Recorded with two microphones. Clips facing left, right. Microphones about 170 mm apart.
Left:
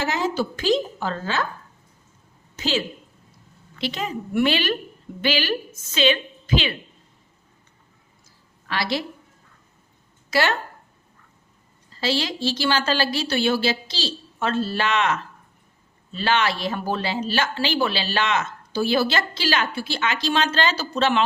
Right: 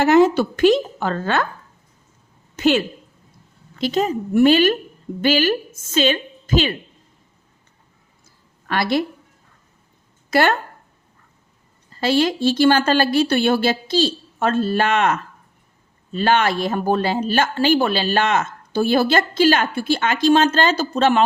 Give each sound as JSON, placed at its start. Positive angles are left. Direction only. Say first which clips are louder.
{"t": 0.0, "sound": "a woman's voice", "louder": "right 10 dB", "side_deg": -60}
{"t": 2.6, "sound": "a woman's voice", "louder": "right 8 dB", "side_deg": -60}
{"t": 3.8, "sound": "a woman's voice", "louder": "right 8 dB", "side_deg": -45}
{"t": 8.6, "sound": "a woman's voice", "louder": "right 6 dB", "side_deg": -50}
{"t": 10.2, "sound": "speech", "louder": "right 5 dB", "side_deg": -50}
{"t": 11.9, "sound": "speech", "louder": "right 7 dB", "side_deg": -50}